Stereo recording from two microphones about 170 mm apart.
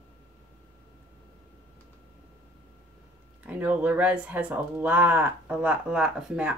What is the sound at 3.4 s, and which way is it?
Speech, 10° right (ahead or behind).